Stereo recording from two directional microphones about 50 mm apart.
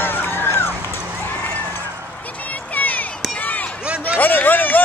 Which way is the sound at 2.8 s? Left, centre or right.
Left.